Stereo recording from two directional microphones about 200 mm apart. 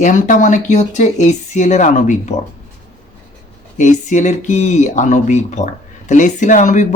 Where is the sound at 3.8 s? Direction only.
40° left (ahead or behind).